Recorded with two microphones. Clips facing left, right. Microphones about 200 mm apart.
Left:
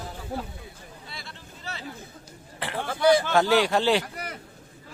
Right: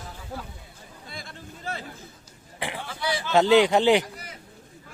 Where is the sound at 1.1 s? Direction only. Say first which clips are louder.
Right 3 dB; 50° right (ahead or behind).